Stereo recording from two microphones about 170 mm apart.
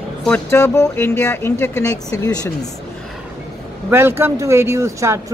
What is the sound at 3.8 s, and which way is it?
Speech, 15° right (ahead or behind).